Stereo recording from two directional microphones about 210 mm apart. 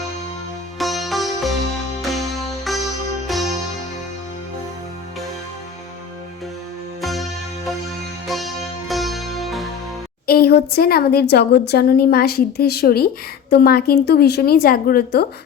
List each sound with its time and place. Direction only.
0.8 s music: centre (ahead or behind)
7.0 s music: centre (ahead or behind)
8.3 s music: centre (ahead or behind)
10.2 s speech: 45° left (ahead or behind)